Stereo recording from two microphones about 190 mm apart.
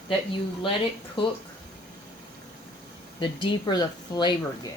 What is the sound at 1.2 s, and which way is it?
Speech, 25° left (ahead or behind).